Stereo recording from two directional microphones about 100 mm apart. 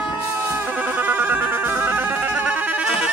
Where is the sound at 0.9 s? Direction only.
20° right (ahead or behind).